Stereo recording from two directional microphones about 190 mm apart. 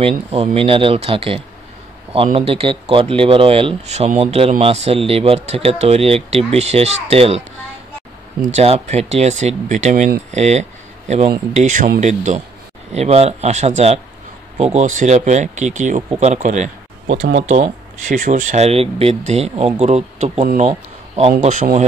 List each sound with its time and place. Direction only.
0.0 s speech: 30° right (ahead or behind)
8.5 s speech: 35° right (ahead or behind)